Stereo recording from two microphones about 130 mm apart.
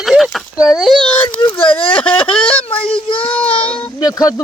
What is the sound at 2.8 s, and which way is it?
Speech, 45° left (ahead or behind).